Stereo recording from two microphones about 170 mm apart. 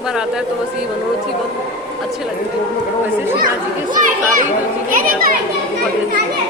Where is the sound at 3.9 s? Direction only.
50° right (ahead or behind).